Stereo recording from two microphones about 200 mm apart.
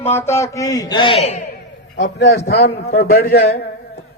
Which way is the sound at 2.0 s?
60° left (ahead or behind).